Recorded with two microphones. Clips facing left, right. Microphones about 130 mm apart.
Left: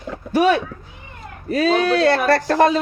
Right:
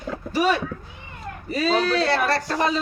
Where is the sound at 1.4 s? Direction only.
50° left (ahead or behind).